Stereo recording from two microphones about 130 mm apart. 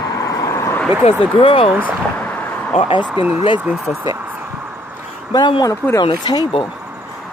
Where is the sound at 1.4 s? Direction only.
40° left (ahead or behind).